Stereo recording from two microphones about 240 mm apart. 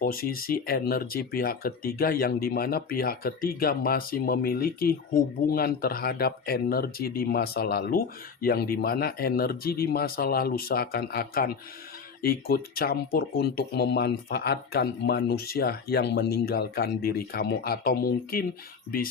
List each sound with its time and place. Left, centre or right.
0.0 s speech: left